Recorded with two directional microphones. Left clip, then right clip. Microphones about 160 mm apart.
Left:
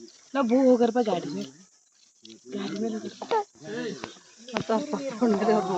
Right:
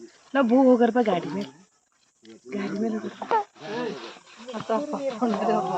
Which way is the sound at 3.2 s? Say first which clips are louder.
Right 3 dB; 10° right (ahead or behind).